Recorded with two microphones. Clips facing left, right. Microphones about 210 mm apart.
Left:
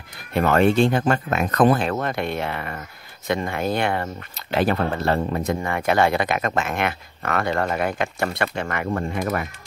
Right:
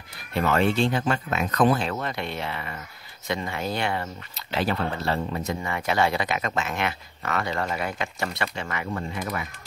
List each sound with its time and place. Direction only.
0.3 s speech: 55° left (ahead or behind)